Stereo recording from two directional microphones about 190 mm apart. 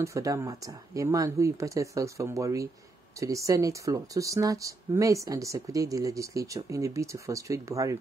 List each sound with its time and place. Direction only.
0.0 s speech: 15° right (ahead or behind)